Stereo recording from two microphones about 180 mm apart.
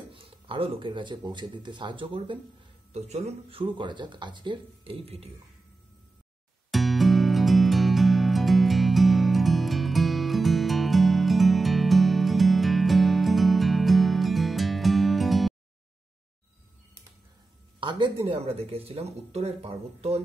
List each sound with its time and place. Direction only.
0.1 s speech: 30° right (ahead or behind)
6.7 s music: centre (ahead or behind)
17.7 s speech: 25° right (ahead or behind)